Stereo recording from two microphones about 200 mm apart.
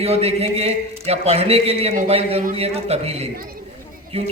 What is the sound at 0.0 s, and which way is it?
A man's voice, 30° right (ahead or behind).